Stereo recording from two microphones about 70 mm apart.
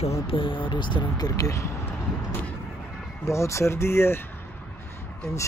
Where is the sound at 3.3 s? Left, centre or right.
Left.